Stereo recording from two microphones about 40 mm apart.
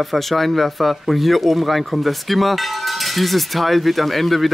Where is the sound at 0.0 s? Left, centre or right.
Centre.